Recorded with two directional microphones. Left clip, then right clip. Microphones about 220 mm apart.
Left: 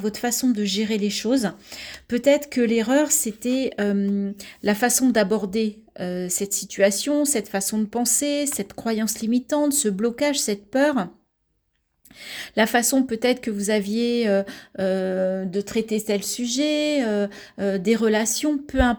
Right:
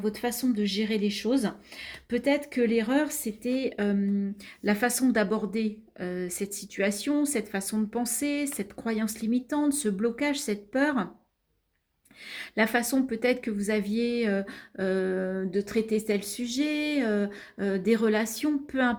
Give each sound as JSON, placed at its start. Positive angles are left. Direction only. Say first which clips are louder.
{"t": 0.0, "sound": "speech", "louder": "left 5 dB", "side_deg": 45}
{"t": 12.2, "sound": "speech", "louder": "left 5 dB", "side_deg": 50}
{"t": 16.0, "sound": "a sound", "louder": "left 5 dB", "side_deg": 35}